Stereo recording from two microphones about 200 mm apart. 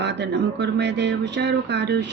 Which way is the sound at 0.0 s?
60° right (ahead or behind).